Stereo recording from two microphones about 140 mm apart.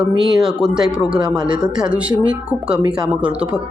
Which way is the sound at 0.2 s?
5° right (ahead or behind).